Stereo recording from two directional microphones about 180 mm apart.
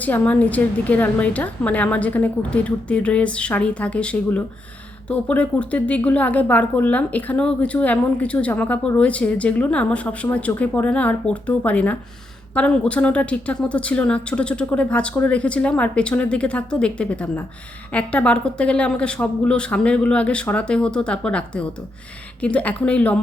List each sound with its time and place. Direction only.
0.0 s a woman's voice: 10° left (ahead or behind)